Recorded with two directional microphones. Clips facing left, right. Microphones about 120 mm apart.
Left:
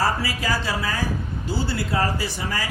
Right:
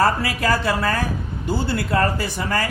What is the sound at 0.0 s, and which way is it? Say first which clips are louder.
Speech: right 5 dB; 55° right (ahead or behind).